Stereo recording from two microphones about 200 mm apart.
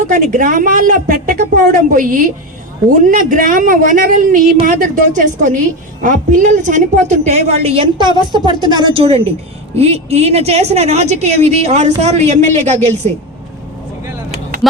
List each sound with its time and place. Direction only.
0.1 s a woman's voice: 40° right (ahead or behind)